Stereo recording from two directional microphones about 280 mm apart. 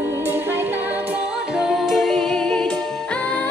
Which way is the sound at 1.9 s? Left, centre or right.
Centre.